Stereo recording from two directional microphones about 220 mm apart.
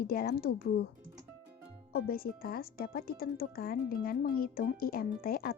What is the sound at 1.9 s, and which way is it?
Speech, 45° left (ahead or behind).